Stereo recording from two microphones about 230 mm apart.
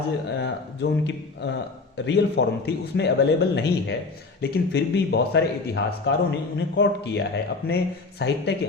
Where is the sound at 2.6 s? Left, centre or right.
Left.